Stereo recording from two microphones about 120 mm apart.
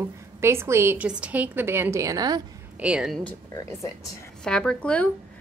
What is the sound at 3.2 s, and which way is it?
Speech, 15° left (ahead or behind).